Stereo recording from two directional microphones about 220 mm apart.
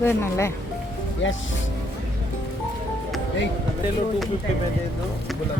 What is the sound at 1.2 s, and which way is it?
Speech, 55° left (ahead or behind).